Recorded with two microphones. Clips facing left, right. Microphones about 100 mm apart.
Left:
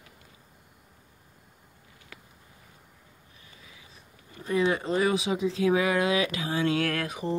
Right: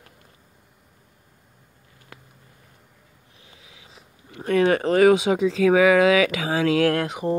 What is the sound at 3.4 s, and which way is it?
Speech, 90° right.